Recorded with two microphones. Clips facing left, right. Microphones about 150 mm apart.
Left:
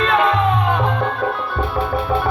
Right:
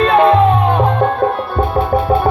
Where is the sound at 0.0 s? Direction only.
35° right (ahead or behind).